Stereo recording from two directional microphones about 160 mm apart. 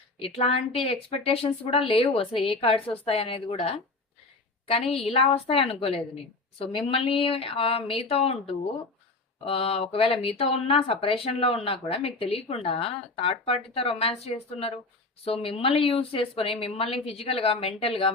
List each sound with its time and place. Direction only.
0.2 s speech: 40° left (ahead or behind)
4.9 s speech: 35° left (ahead or behind)